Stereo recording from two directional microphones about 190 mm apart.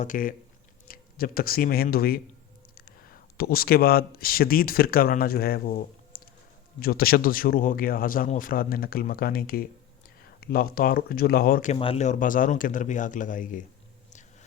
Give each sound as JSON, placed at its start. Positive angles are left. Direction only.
{"t": 0.0, "sound": "speech", "side_deg": 45}
{"t": 6.7, "sound": "speech", "side_deg": 50}
{"t": 11.7, "sound": "speech", "side_deg": 30}